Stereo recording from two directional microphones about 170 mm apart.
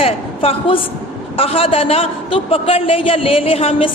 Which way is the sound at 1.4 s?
35° left (ahead or behind).